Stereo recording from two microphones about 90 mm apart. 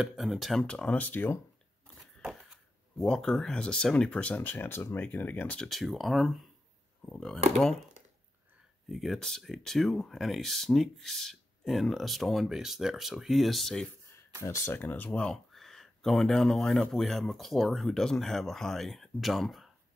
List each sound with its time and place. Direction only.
0.0 s speech: 5° right (ahead or behind); by 1.4 s 20° left (ahead or behind)
3.0 s speech: 5° left (ahead or behind)
5.7 s speech: centre (ahead or behind)
8.8 s speech: centre (ahead or behind)
14.4 s speech: 35° left (ahead or behind)
14.7 s speech: 20° left (ahead or behind); by 19.7 s centre (ahead or behind)